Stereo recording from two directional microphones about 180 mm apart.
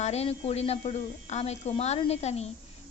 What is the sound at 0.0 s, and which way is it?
A woman's voice, 35° left (ahead or behind).